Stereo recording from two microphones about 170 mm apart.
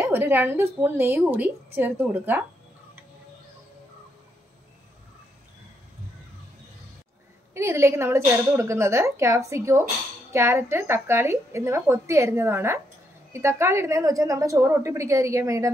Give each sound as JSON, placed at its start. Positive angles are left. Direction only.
{"t": 0.0, "sound": "a woman's voice", "side_deg": -10}
{"t": 7.5, "sound": "a woman's voice", "side_deg": -15}